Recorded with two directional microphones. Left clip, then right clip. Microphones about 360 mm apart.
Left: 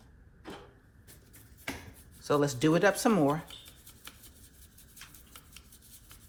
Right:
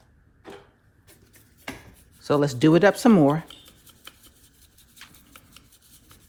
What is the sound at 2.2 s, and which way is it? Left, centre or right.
Speech, right.